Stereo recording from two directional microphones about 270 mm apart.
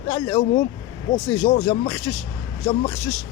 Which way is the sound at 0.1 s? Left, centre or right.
Centre.